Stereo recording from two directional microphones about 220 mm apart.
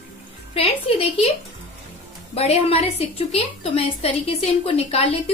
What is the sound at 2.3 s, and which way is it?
A woman's voice, 25° left (ahead or behind).